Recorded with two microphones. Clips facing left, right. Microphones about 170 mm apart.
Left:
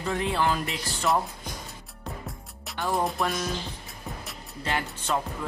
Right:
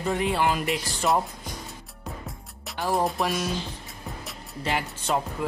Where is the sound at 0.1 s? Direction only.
10° right (ahead or behind).